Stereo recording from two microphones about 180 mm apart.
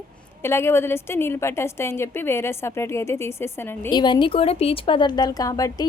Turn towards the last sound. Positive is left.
turn(degrees=20)  # may be behind; listen again after turning